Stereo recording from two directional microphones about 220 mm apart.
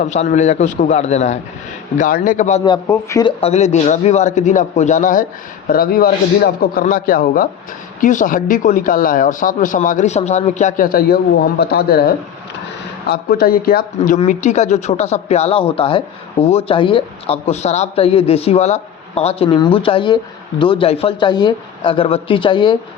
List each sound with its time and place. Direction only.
0.0 s speech: 35° left (ahead or behind)
2.6 s speech: 20° left (ahead or behind)
3.4 s speech: 30° left (ahead or behind)